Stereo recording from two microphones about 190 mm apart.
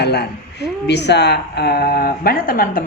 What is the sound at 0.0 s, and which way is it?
A woman's voice, 60° left (ahead or behind).